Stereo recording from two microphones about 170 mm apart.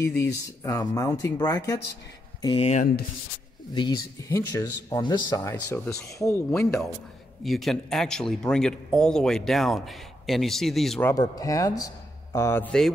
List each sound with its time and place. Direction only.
0.0 s speech: 15° left (ahead or behind)
2.4 s speech: 35° left (ahead or behind); by 6.4 s 15° left (ahead or behind)
6.5 s speech: 5° left (ahead or behind)
11.1 s speech: 20° left (ahead or behind)